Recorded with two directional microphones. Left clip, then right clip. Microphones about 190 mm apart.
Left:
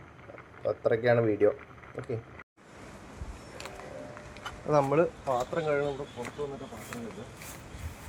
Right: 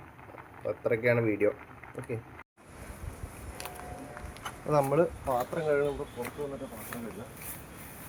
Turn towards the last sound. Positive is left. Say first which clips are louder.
# even
turn(degrees=0)  # may be behind; listen again after turning